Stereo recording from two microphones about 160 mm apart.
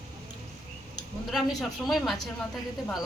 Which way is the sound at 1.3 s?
Centre (ahead or behind).